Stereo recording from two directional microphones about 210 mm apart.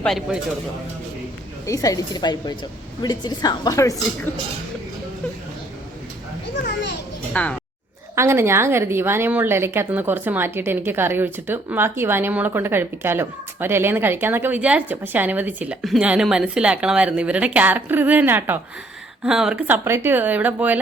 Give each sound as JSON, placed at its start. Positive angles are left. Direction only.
{"t": 0.0, "sound": "speech", "side_deg": 0}
{"t": 1.6, "sound": "a woman's voice", "side_deg": 15}
{"t": 7.3, "sound": "a woman's voice", "side_deg": 5}
{"t": 8.1, "sound": "a woman's voice", "side_deg": -10}